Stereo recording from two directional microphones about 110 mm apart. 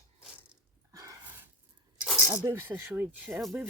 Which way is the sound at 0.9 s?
30° right (ahead or behind).